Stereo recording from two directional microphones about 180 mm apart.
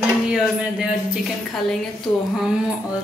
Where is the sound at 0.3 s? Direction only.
5° right (ahead or behind).